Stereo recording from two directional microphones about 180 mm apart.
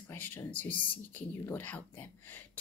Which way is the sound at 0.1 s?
10° left (ahead or behind).